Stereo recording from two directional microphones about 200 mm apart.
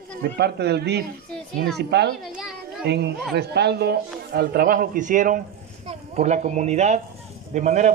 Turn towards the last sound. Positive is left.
turn(degrees=-35)  # may be behind; listen again after turning